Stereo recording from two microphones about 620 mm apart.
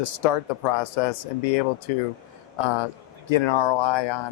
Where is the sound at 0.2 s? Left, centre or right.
Left.